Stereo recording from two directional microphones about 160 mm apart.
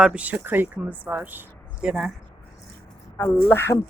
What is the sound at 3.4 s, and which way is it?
Speech, 15° left (ahead or behind).